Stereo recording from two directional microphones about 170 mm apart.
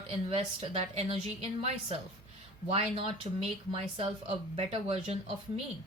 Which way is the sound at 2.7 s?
35° right (ahead or behind).